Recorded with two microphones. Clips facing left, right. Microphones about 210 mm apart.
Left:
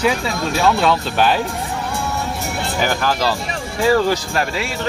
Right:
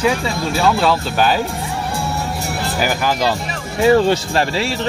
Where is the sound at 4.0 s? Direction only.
30° right (ahead or behind).